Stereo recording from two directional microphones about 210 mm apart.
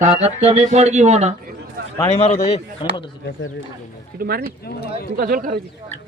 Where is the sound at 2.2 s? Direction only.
30° left (ahead or behind).